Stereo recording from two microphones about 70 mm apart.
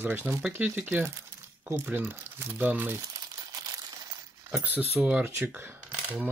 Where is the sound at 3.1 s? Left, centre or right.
Right.